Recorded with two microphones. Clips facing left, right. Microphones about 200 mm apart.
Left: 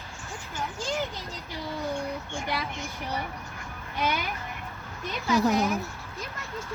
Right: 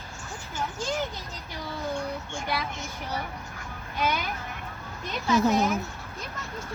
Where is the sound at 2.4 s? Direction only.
15° left (ahead or behind).